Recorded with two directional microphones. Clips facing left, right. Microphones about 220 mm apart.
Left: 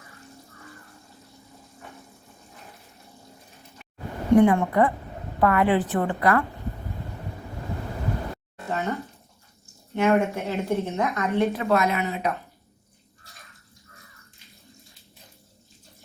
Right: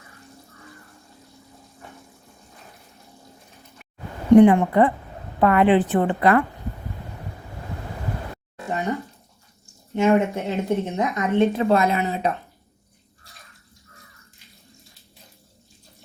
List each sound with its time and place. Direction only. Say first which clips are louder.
4.4 s a woman's voice: right 5 dB; 20° right (ahead or behind)
8.7 s a sound: right 2 dB; 15° right (ahead or behind)
9.9 s speech: right 3 dB; 15° right (ahead or behind)
11.5 s a woman's voice: right 3 dB; 30° right (ahead or behind)